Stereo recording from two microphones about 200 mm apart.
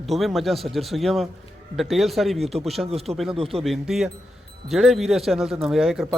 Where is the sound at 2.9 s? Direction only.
30° right (ahead or behind).